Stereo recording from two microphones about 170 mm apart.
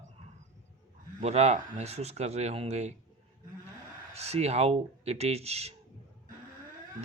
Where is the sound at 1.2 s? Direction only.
40° right (ahead or behind).